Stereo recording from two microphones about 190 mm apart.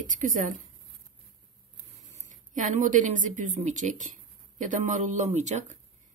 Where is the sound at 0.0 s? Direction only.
40° right (ahead or behind).